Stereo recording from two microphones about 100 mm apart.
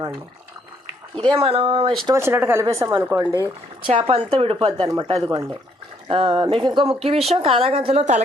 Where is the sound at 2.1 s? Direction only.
25° right (ahead or behind).